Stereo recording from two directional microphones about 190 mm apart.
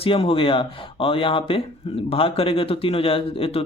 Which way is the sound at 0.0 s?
30° left (ahead or behind).